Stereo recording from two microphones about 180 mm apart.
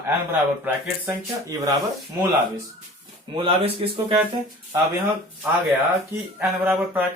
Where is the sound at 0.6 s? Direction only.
15° right (ahead or behind).